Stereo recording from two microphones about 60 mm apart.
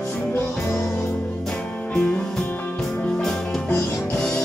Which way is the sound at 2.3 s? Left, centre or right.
Centre.